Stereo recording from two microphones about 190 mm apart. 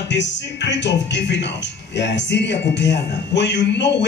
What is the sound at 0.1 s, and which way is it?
Speech, 65° left (ahead or behind).